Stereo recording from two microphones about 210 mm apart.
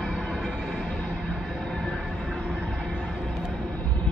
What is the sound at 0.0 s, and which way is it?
Music, 5° left (ahead or behind).